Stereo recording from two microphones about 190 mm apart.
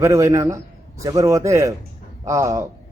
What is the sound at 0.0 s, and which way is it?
A man's voice, 15° right (ahead or behind).